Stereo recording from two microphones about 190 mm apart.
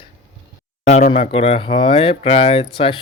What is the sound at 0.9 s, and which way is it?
Speech, 35° left (ahead or behind).